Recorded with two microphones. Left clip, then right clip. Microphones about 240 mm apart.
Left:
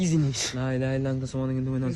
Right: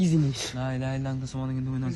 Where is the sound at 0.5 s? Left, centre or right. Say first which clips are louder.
Left 4 dB; centre.